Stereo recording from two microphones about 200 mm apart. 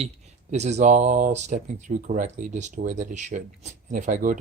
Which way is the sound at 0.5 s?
35° right (ahead or behind).